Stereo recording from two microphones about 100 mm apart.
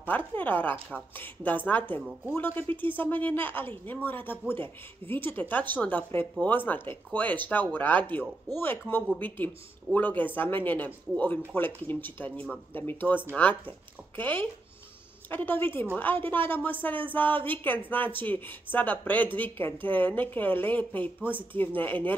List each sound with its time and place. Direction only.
0.0 s a woman's voice: 20° left (ahead or behind)